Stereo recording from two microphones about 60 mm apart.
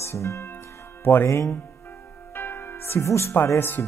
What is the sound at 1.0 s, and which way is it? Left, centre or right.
Speech, left.